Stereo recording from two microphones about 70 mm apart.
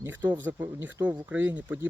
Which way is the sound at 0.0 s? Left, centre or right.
Right.